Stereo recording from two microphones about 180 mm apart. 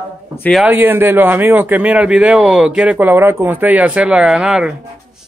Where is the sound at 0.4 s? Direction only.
Centre (ahead or behind).